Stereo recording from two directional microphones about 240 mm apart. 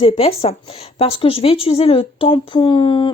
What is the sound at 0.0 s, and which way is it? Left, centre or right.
Speech, left.